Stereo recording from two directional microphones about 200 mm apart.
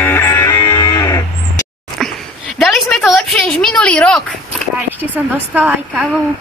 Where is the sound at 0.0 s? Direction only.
10° left (ahead or behind).